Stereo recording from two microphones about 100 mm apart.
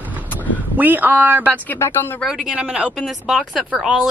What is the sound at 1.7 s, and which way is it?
Speech, 25° left (ahead or behind).